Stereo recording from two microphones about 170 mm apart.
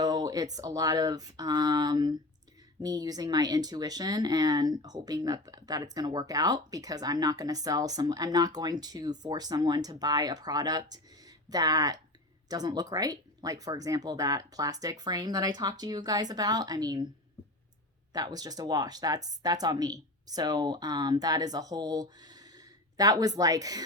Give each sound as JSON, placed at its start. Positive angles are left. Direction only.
{"t": 0.0, "sound": "speech", "side_deg": -25}
{"t": 18.1, "sound": "speech", "side_deg": -20}